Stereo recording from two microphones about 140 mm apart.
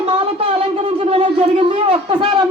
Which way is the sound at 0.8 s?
45° right (ahead or behind).